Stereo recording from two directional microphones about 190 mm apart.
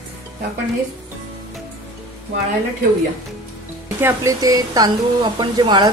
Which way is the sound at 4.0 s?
15° right (ahead or behind).